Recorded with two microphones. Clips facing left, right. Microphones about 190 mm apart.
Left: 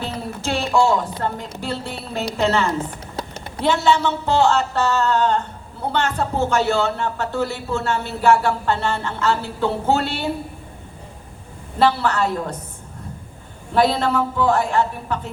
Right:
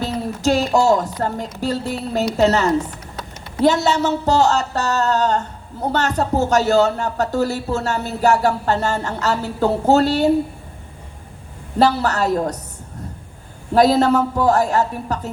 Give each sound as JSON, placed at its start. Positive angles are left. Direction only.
{"t": 0.0, "sound": "a woman's voice", "side_deg": -40}
{"t": 11.8, "sound": "speech", "side_deg": -40}
{"t": 13.7, "sound": "speech", "side_deg": -40}